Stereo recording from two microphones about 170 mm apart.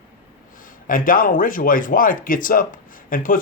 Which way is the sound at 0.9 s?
55° left (ahead or behind).